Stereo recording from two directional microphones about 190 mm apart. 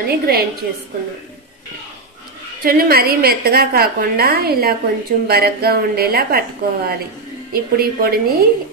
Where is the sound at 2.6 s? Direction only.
50° right (ahead or behind).